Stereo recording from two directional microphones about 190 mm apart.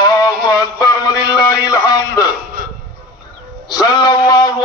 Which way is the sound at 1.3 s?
20° left (ahead or behind).